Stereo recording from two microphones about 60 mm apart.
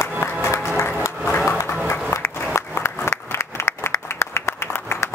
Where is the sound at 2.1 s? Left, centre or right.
Left.